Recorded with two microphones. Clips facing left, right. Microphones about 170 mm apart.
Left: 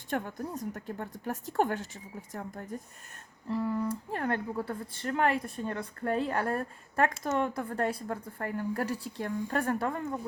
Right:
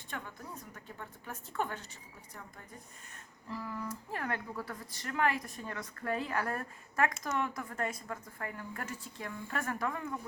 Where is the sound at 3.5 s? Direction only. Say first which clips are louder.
Left 9 dB; 30° left (ahead or behind).